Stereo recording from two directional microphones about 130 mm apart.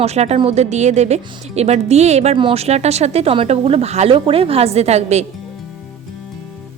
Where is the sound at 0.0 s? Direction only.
55° right (ahead or behind).